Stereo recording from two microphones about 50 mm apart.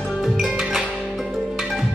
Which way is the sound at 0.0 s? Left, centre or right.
Centre.